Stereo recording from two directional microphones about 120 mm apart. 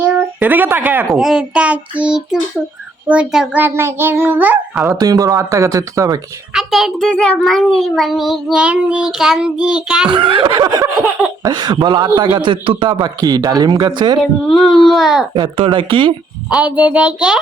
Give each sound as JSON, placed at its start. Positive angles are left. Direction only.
{"t": 0.3, "sound": "a child's voice", "side_deg": -15}
{"t": 1.1, "sound": "a child's voice", "side_deg": -5}
{"t": 3.6, "sound": "speech", "side_deg": -20}
{"t": 4.9, "sound": "speech", "side_deg": -30}
{"t": 6.5, "sound": "a child's voice", "side_deg": 0}
{"t": 10.1, "sound": "a man's voice", "side_deg": -45}
{"t": 14.4, "sound": "a child's voice", "side_deg": 0}
{"t": 15.4, "sound": "speech", "side_deg": -45}
{"t": 16.5, "sound": "a child's voice", "side_deg": -10}